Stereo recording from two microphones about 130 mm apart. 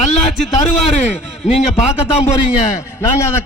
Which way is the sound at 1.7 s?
55° left (ahead or behind).